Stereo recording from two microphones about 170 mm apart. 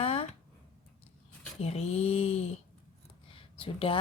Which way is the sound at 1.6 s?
35° left (ahead or behind).